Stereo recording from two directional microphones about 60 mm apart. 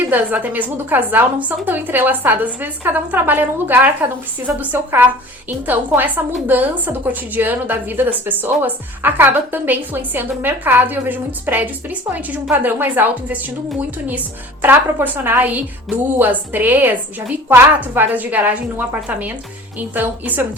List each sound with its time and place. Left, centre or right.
0.1 s a woman's voice: right
14.6 s a woman's voice: right